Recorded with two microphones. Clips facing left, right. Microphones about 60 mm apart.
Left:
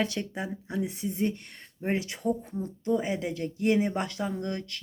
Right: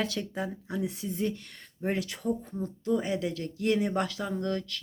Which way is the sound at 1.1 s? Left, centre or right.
Left.